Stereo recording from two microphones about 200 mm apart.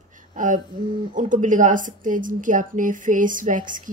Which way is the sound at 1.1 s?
40° right (ahead or behind).